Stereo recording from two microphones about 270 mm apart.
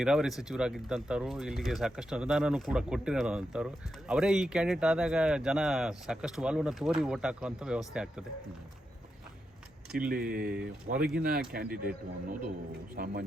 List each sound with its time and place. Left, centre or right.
0.0 s speech: centre
10.1 s speech: right